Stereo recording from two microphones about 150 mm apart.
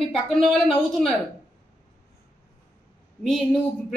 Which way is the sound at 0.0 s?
Centre (ahead or behind).